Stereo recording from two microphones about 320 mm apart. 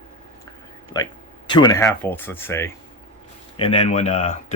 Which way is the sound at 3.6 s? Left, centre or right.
Centre.